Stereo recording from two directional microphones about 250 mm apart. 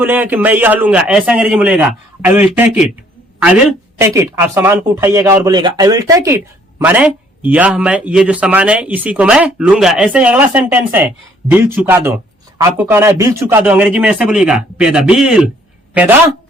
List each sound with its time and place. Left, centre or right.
0.0 s speech: centre
4.0 s speech: centre